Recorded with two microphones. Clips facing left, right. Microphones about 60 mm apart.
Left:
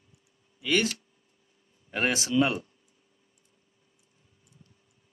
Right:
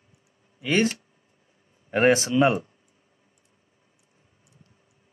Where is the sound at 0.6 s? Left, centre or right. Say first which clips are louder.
Right 4 dB; right.